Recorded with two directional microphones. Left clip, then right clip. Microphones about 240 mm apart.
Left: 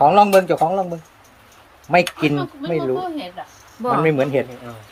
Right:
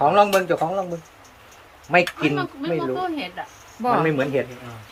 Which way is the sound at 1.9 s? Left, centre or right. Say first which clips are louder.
Left 2 dB; left.